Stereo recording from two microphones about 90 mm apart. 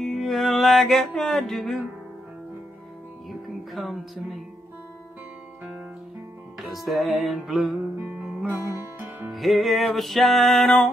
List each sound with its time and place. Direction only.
0.0 s music: centre (ahead or behind)
3.3 s music: centre (ahead or behind)
6.6 s music: centre (ahead or behind)
8.2 s music: 15° right (ahead or behind)
9.3 s music: centre (ahead or behind)